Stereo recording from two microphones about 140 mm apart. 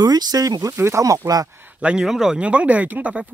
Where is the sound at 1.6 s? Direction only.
10° right (ahead or behind).